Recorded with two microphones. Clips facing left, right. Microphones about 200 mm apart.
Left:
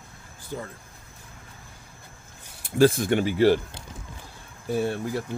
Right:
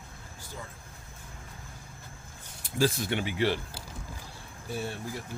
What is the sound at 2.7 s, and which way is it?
Speech, 55° left (ahead or behind).